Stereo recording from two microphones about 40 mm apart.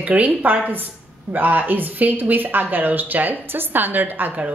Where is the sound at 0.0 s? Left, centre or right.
Right.